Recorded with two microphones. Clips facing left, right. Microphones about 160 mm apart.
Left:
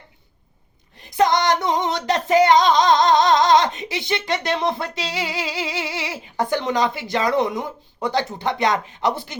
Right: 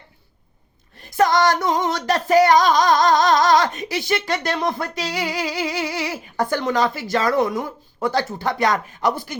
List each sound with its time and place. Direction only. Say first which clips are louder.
0.9 s singing: right 1 dB; 20° left (ahead or behind)